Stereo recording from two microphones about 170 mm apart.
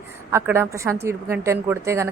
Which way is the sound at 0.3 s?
15° right (ahead or behind).